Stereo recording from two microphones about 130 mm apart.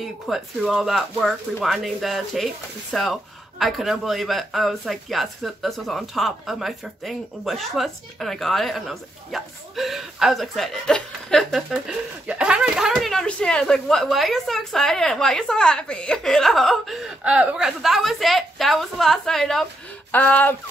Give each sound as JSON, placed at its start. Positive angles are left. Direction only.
{"t": 0.0, "sound": "speech", "side_deg": 0}